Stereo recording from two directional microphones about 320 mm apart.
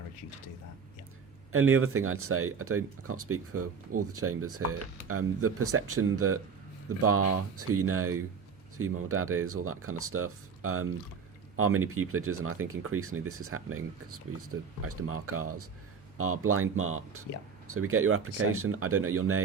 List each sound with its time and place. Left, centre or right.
1.5 s speech: right